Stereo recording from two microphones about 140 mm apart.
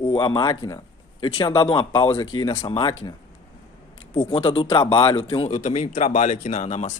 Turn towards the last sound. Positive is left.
turn(degrees=55)  # may be behind; listen again after turning